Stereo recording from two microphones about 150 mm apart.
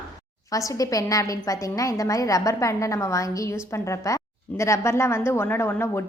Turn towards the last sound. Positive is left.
turn(degrees=15)  # may be behind; listen again after turning